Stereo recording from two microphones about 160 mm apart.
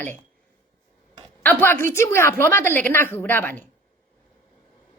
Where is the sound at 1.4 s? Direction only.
10° left (ahead or behind).